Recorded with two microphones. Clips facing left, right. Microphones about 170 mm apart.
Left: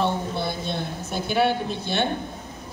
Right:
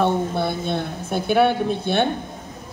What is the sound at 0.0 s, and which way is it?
A woman's voice, 55° right (ahead or behind).